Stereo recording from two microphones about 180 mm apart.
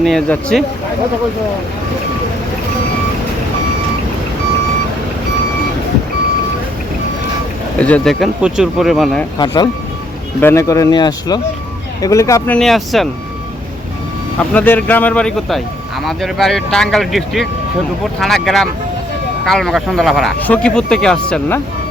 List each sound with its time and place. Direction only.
0.0 s speech: 5° left (ahead or behind)
7.8 s speech: 5° left (ahead or behind)
10.4 s speech: 15° left (ahead or behind)
12.5 s speech: centre (ahead or behind)
14.3 s speech: 10° left (ahead or behind)